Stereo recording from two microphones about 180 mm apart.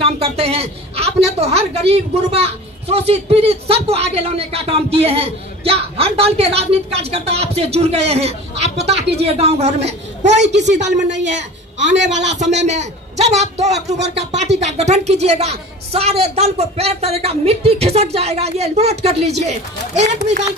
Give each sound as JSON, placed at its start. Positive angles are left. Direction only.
{"t": 0.0, "sound": "a man's voice", "side_deg": -35}
{"t": 10.3, "sound": "a woman's voice", "side_deg": -75}
{"t": 10.9, "sound": "a woman's voice", "side_deg": -40}